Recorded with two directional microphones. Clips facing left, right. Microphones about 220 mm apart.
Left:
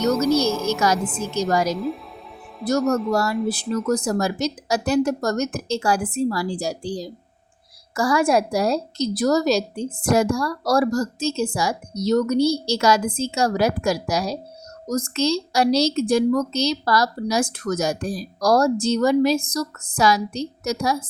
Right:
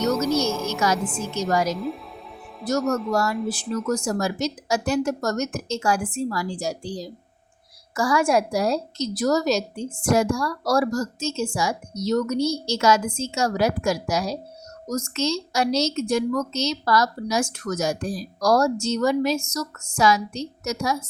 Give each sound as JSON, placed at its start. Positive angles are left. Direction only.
{"t": 0.0, "sound": "music", "side_deg": 0}
{"t": 0.9, "sound": "a woman's voice", "side_deg": 0}
{"t": 3.1, "sound": "a woman's voice", "side_deg": 35}
{"t": 3.3, "sound": "a woman's voice", "side_deg": 0}
{"t": 3.8, "sound": "a woman's voice", "side_deg": 35}